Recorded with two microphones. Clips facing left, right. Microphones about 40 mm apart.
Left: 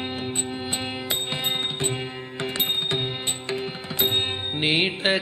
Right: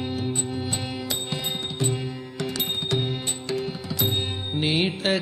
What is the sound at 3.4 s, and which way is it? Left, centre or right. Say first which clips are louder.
Music: right 4 dB; left.